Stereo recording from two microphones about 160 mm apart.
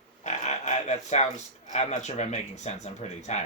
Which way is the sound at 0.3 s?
45° left (ahead or behind).